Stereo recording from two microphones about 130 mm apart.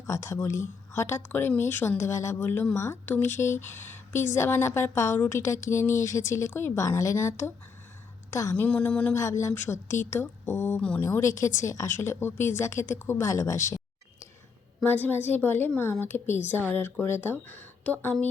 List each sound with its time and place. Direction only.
0.0 s a woman's voice: 25° left (ahead or behind)
8.5 s a woman's voice: 10° left (ahead or behind)
9.1 s speech: 20° left (ahead or behind)
10.8 s a woman's voice: 10° left (ahead or behind)
11.0 s speech: 20° left (ahead or behind)
14.8 s a woman's voice: 15° left (ahead or behind)